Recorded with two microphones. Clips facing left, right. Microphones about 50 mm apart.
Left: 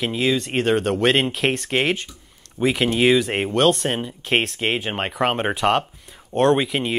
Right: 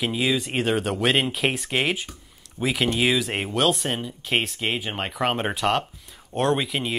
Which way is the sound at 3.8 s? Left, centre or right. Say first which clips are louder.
Left 4 dB; left.